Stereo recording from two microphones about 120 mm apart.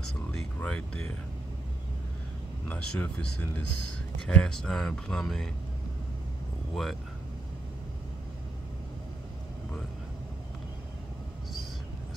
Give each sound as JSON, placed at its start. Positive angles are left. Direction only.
{"t": 0.3, "sound": "a sound", "side_deg": 10}
{"t": 2.7, "sound": "speech", "side_deg": 10}
{"t": 6.7, "sound": "speech", "side_deg": 0}